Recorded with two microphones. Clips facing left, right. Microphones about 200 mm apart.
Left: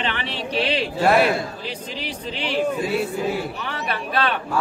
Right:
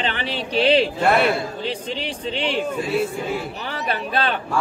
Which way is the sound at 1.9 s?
30° right (ahead or behind).